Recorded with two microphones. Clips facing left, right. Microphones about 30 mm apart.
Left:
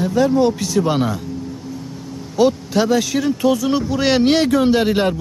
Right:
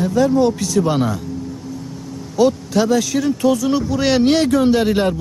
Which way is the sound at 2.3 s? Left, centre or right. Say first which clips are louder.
Even; centre.